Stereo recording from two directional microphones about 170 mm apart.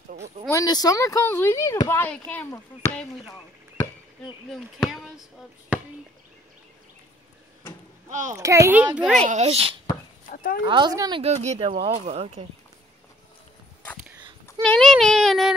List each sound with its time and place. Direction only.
0.5 s speech: 20° left (ahead or behind)
4.5 s child singing: centre (ahead or behind)
8.1 s a child's voice: 45° right (ahead or behind)
8.4 s a child's voice: 20° right (ahead or behind)
9.3 s speech: 40° right (ahead or behind)
10.3 s speech: 55° left (ahead or behind)
10.6 s speech: 25° right (ahead or behind)
11.2 s speech: 40° right (ahead or behind)
14.6 s child singing: 5° left (ahead or behind)